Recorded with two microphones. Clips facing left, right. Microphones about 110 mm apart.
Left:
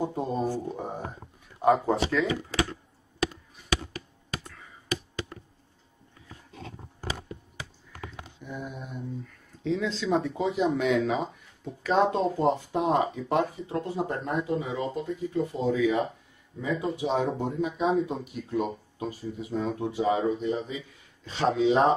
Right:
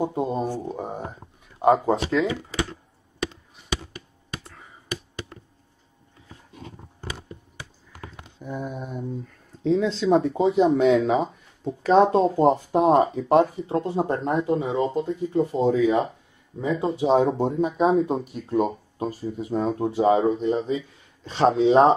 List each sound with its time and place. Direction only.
0.0 s speech: 20° right (ahead or behind)
8.4 s speech: 40° right (ahead or behind)